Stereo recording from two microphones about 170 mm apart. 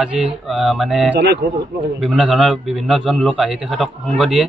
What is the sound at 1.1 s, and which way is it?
Speech, 80° right.